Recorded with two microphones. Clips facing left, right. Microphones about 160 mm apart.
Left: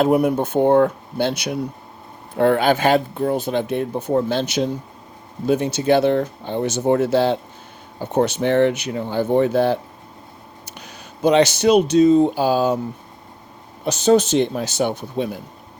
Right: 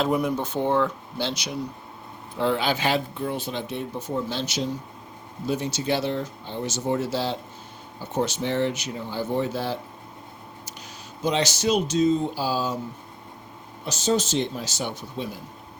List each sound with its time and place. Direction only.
0.0 s speech: 60° left (ahead or behind)
13.8 s speech: 60° left (ahead or behind)